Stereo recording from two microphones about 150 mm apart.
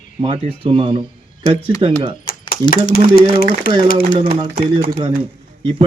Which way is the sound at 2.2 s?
75° left (ahead or behind).